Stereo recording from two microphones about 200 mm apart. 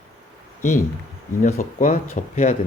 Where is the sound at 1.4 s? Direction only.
40° left (ahead or behind).